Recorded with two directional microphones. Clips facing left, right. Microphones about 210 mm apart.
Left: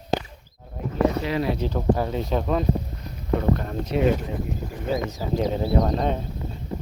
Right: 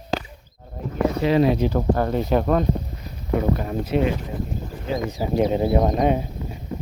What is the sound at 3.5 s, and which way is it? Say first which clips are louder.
Speech: right 2 dB; 5° right (ahead or behind).